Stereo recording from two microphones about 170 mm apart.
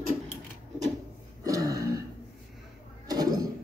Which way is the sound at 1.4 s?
20° right (ahead or behind).